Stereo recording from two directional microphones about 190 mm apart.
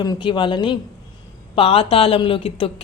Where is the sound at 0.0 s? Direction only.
25° left (ahead or behind).